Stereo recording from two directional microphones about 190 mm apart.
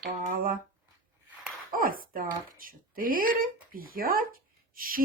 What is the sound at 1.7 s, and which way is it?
Speech, 45° right (ahead or behind).